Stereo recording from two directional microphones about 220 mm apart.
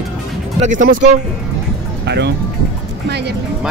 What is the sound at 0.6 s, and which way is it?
Speech, 35° right (ahead or behind).